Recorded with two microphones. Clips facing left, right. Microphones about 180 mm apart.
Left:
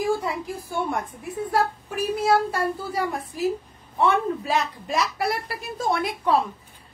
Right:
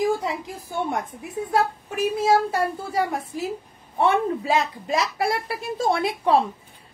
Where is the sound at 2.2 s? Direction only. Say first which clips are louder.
Right 1 dB; 25° right (ahead or behind).